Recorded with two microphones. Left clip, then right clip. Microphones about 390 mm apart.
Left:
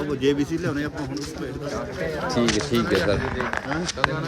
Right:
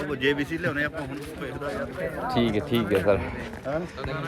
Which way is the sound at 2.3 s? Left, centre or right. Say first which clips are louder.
Left 2 dB; centre.